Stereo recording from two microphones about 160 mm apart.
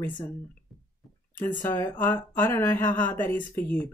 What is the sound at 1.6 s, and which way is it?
Speech, 10° left (ahead or behind).